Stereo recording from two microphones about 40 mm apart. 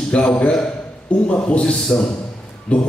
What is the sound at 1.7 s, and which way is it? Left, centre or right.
Speech, centre.